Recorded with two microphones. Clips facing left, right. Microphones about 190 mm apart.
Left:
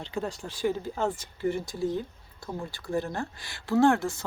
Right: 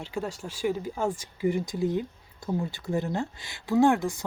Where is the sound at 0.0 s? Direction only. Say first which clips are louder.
Even; 10° right (ahead or behind).